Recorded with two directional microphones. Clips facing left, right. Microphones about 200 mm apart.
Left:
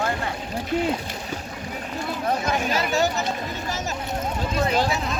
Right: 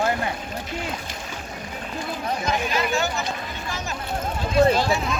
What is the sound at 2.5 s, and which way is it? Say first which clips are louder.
Speech: left 1 dB; 40° left (ahead or behind).